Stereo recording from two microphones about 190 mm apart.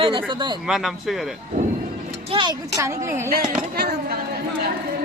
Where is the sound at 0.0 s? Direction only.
25° right (ahead or behind).